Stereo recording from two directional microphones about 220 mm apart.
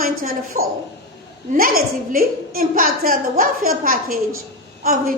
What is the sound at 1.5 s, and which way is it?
A woman's voice, 40° right (ahead or behind).